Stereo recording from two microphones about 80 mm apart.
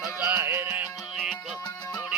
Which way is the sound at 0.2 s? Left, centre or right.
Right.